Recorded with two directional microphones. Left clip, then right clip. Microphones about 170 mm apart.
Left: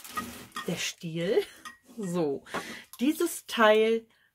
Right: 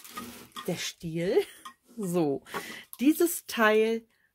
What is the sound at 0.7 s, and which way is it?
Speech, 30° right (ahead or behind).